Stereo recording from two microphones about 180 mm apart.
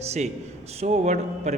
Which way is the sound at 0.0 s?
35° right (ahead or behind).